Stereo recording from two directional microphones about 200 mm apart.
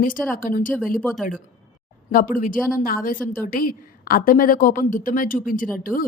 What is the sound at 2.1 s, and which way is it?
A woman's voice, 45° left (ahead or behind).